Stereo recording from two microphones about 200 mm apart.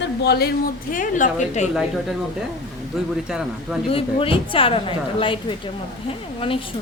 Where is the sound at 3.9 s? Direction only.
25° left (ahead or behind).